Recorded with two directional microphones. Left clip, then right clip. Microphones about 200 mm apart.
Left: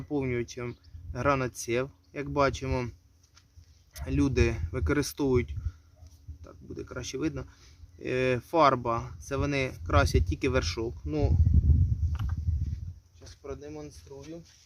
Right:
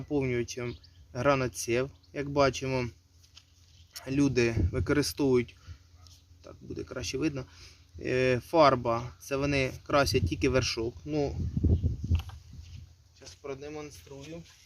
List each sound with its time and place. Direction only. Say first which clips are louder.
0.1 s speech: right 1 dB; 5° left (ahead or behind)
3.9 s speech: right 1 dB; centre (ahead or behind)
13.1 s a sound: right 1 dB; 20° left (ahead or behind)